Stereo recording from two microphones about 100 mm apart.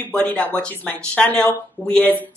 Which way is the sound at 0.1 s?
15° left (ahead or behind).